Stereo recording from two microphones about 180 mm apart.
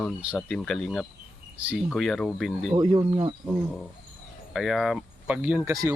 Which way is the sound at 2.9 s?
30° right (ahead or behind).